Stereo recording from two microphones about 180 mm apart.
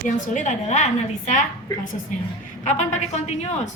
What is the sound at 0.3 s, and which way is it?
Speech, 40° left (ahead or behind).